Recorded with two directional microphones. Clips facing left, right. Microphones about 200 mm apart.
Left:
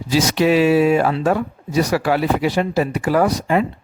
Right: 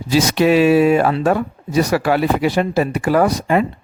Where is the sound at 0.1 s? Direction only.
55° right (ahead or behind).